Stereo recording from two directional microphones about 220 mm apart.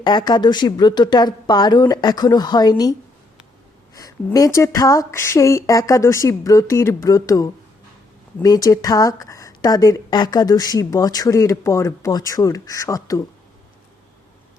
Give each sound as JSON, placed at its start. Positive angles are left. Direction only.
{"t": 0.0, "sound": "speech", "side_deg": 20}
{"t": 3.9, "sound": "speech", "side_deg": 15}